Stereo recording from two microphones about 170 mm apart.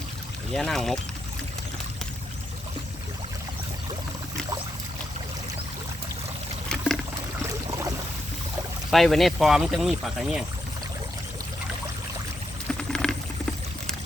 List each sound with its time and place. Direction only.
0.5 s speech: centre (ahead or behind)
6.7 s pour: 5° left (ahead or behind)
7.7 s boat: 20° right (ahead or behind)
8.9 s speech: centre (ahead or behind)
12.9 s patter: 5° left (ahead or behind)